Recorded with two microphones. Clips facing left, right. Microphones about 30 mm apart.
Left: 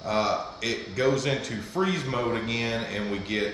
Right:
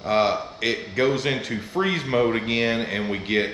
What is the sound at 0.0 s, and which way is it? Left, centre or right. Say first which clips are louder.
A man's voice: right 5 dB; right.